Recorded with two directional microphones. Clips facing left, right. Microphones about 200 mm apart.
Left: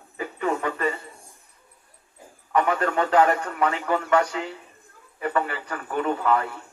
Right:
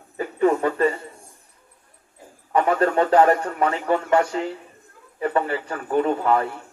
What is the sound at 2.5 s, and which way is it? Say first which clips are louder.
A man's voice: right 4 dB; 35° right (ahead or behind).